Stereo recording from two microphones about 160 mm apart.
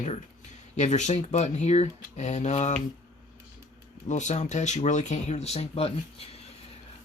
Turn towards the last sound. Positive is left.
turn(degrees=40)  # may be behind; listen again after turning